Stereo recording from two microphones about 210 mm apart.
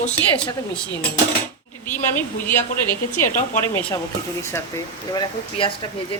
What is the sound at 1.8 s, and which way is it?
Speech, 10° left (ahead or behind).